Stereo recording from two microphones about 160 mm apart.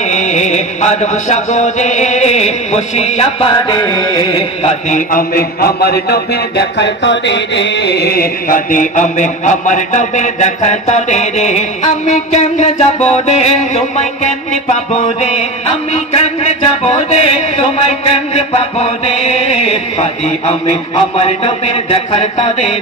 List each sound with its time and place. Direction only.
0.1 s chant: 45° left (ahead or behind)
3.5 s mantra: 25° left (ahead or behind)
5.1 s a man's voice: 70° left (ahead or behind); by 15.4 s 45° left (ahead or behind)
15.9 s a sound: 40° left (ahead or behind)